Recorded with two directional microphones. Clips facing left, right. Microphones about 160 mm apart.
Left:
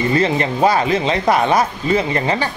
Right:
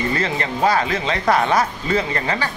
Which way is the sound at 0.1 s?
20° left (ahead or behind).